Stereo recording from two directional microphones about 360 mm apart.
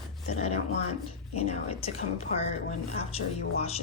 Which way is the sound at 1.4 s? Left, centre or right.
Centre.